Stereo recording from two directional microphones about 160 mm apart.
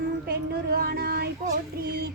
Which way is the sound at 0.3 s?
70° right (ahead or behind).